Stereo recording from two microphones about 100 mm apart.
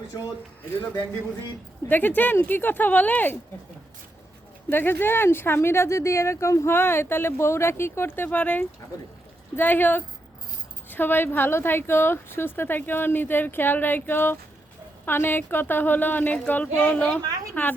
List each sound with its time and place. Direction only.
1.9 s speech: 20° left (ahead or behind)
4.7 s a woman's voice: 20° left (ahead or behind)